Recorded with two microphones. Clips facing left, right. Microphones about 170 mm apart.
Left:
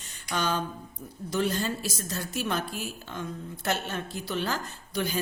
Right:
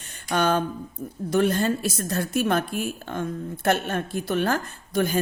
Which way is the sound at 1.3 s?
55° right (ahead or behind).